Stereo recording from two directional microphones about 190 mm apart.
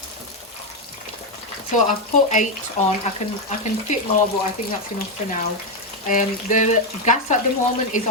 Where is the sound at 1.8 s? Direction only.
40° left (ahead or behind).